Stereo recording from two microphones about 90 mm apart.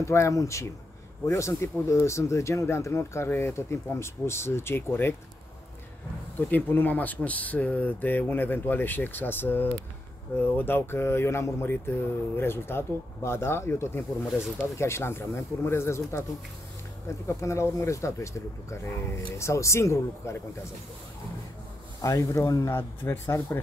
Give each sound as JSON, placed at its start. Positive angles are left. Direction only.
{"t": 0.0, "sound": "speech", "side_deg": 30}
{"t": 6.5, "sound": "speech", "side_deg": 20}
{"t": 17.3, "sound": "speech", "side_deg": 30}
{"t": 22.0, "sound": "speech", "side_deg": 40}
{"t": 22.7, "sound": "speech", "side_deg": 25}